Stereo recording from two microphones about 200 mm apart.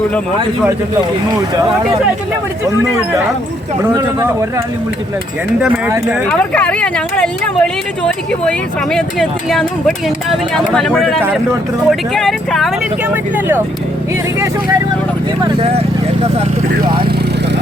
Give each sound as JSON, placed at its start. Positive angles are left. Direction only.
{"t": 3.9, "sound": "speech", "side_deg": -15}
{"t": 6.4, "sound": "speech", "side_deg": 5}
{"t": 15.4, "sound": "speech", "side_deg": -30}